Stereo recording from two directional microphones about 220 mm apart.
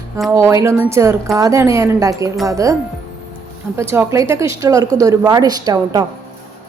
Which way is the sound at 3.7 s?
10° right (ahead or behind).